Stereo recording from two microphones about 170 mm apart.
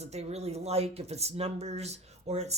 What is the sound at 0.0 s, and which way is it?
Speech, 40° right (ahead or behind).